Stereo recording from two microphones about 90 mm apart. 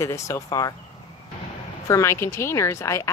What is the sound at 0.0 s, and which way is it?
Speech, 35° left (ahead or behind).